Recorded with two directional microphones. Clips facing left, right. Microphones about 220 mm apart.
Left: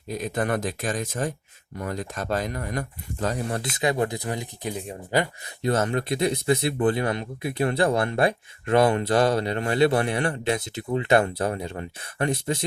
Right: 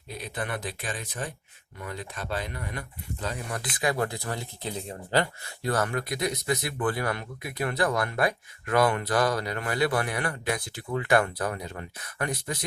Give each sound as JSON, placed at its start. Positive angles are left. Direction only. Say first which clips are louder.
{"t": 0.1, "sound": "speech", "louder": "left 8 dB", "side_deg": 45}
{"t": 3.8, "sound": "speech", "louder": "left 3 dB", "side_deg": 20}